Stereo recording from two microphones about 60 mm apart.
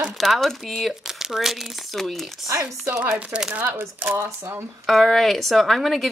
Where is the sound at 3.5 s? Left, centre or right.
Right.